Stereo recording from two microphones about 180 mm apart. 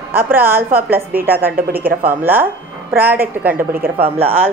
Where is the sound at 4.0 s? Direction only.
35° right (ahead or behind).